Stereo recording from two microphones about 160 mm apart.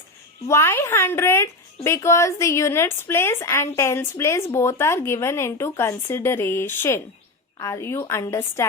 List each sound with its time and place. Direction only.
0.4 s a woman's voice: 15° left (ahead or behind)